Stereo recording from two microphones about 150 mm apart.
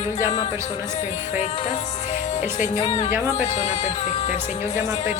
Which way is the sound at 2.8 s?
45° left (ahead or behind).